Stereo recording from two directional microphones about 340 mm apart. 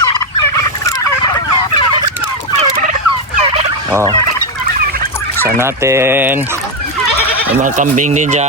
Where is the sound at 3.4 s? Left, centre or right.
Centre.